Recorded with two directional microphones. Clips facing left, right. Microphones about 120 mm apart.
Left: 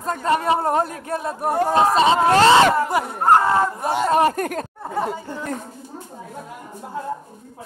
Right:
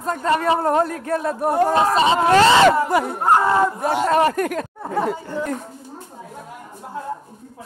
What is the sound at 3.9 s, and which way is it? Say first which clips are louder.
Speech: left 1 dB; 30° left (ahead or behind).